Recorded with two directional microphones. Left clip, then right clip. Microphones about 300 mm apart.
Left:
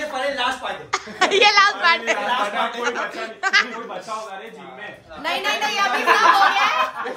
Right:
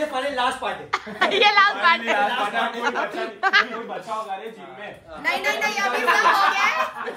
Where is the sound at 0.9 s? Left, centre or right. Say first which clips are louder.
Left 3 dB; centre.